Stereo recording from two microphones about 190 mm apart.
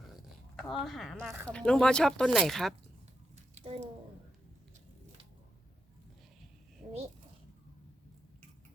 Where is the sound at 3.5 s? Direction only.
35° right (ahead or behind).